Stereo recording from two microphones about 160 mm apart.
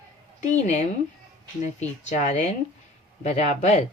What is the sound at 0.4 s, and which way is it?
Speech, 45° left (ahead or behind).